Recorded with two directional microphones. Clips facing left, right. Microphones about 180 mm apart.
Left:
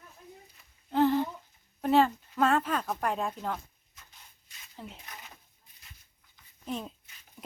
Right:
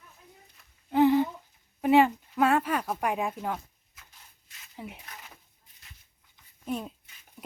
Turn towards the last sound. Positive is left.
turn(degrees=-5)  # may be behind; listen again after turning